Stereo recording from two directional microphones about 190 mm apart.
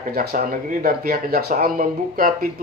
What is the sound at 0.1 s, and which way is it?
Speech, 50° right (ahead or behind).